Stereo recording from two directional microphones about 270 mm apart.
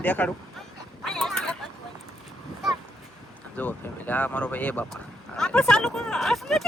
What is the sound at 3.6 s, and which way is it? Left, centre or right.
Speech, centre.